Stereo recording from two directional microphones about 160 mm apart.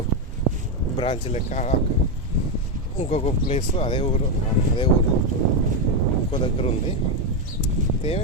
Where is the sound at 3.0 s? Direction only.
40° left (ahead or behind).